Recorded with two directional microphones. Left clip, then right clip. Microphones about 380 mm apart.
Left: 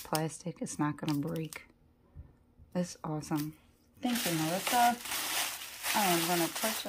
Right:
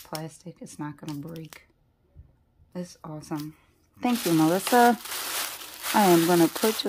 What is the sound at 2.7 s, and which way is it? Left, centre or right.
Speech, centre.